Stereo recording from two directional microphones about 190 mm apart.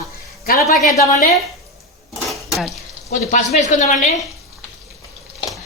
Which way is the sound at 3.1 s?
40° left (ahead or behind).